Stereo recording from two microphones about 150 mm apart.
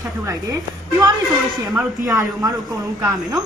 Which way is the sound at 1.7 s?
5° right (ahead or behind).